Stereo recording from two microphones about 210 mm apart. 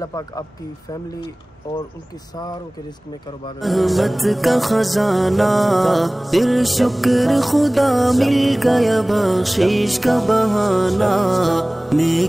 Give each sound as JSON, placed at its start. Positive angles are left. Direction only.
{"t": 0.0, "sound": "speech", "side_deg": 15}
{"t": 3.6, "sound": "music", "side_deg": 0}